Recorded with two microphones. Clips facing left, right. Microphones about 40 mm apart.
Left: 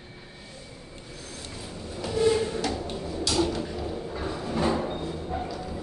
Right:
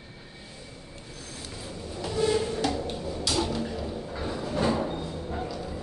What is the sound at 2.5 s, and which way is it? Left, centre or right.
Music, centre.